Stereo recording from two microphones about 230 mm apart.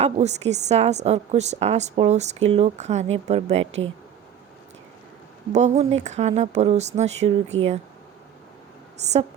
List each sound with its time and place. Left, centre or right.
0.0 s a woman's voice: right
5.5 s a woman's voice: right